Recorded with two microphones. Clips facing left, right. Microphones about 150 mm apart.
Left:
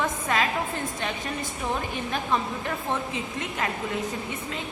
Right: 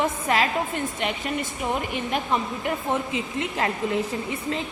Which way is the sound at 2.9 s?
20° right (ahead or behind).